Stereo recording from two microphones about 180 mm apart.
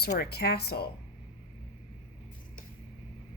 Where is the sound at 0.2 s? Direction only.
60° left (ahead or behind).